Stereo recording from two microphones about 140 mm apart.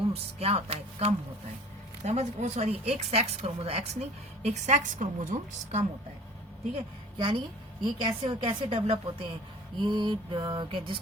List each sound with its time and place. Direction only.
0.1 s a woman's voice: 45° right (ahead or behind); by 5.8 s 65° right (ahead or behind)
7.2 s a woman's voice: 35° right (ahead or behind)